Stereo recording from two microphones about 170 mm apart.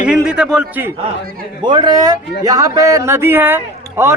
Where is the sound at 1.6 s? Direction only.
25° right (ahead or behind).